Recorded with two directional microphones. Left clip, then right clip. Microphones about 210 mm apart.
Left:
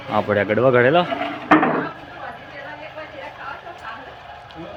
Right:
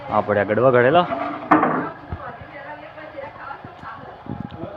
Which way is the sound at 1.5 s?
35° left (ahead or behind).